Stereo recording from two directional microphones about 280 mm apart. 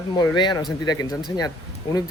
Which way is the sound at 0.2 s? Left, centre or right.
Centre.